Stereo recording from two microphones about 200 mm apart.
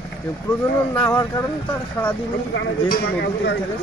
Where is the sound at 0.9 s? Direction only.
10° left (ahead or behind).